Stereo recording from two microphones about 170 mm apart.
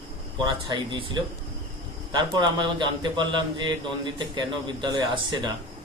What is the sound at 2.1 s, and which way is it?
A man's voice, 25° right (ahead or behind).